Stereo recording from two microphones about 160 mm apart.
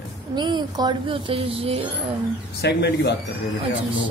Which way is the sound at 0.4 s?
30° right (ahead or behind).